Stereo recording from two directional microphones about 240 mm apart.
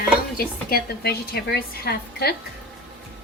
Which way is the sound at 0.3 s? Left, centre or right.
Left.